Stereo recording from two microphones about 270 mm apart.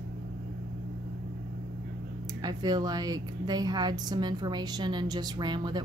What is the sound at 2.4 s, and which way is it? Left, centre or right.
A woman's voice, centre.